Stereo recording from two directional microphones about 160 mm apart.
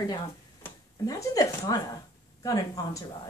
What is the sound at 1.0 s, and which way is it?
A woman's voice, 20° left (ahead or behind).